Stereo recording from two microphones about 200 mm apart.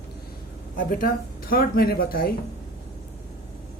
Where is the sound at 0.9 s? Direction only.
45° left (ahead or behind).